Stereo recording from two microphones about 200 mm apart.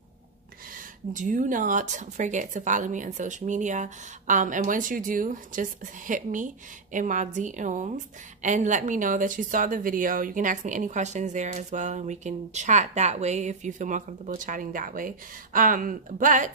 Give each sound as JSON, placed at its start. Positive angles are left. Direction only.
{"t": 1.1, "sound": "speech", "side_deg": -40}